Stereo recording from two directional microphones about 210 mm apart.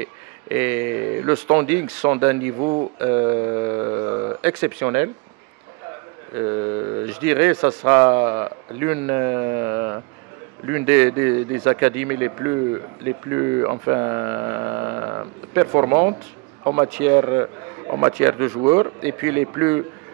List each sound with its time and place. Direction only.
0.0 s speech: 10° right (ahead or behind)
2.5 s speech: 25° right (ahead or behind)
3.0 s speech: 15° right (ahead or behind)
6.3 s a man's voice: 20° right (ahead or behind)